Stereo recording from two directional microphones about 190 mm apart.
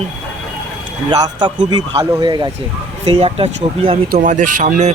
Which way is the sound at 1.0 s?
25° right (ahead or behind).